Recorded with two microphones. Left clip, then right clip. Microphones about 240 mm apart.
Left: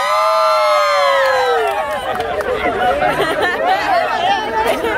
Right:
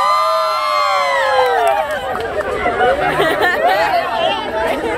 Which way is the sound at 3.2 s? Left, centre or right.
Centre.